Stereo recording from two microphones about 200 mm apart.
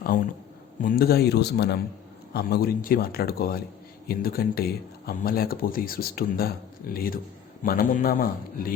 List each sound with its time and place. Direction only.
0.8 s speech: 45° left (ahead or behind)